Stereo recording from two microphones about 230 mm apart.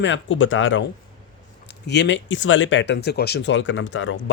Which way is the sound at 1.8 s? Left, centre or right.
Left.